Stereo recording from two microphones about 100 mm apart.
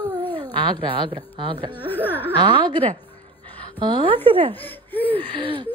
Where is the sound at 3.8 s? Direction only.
55° right (ahead or behind).